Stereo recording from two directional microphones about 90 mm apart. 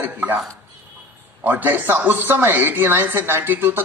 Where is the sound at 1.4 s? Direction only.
20° right (ahead or behind).